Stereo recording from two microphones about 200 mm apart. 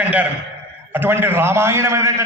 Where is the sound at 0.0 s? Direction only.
5° right (ahead or behind).